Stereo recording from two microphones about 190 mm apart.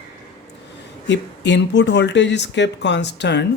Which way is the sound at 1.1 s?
65° left (ahead or behind).